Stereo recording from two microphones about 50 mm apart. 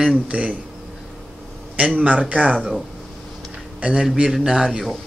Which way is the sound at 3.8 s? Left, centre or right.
Centre.